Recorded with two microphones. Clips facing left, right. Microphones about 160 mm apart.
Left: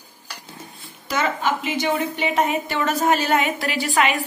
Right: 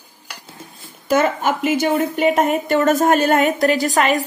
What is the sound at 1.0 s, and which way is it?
A woman's voice, 50° right (ahead or behind).